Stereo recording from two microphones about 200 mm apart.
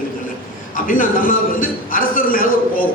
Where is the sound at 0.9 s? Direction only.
40° left (ahead or behind).